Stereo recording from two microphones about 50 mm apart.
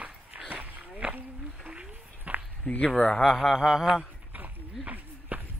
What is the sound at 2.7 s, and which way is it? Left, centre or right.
Speech, left.